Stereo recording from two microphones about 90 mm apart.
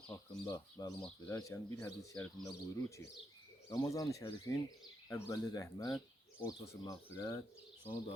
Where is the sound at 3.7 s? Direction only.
40° left (ahead or behind).